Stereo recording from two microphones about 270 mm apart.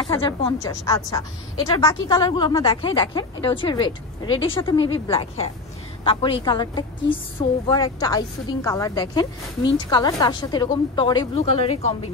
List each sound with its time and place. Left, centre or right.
0.0 s a woman's voice: centre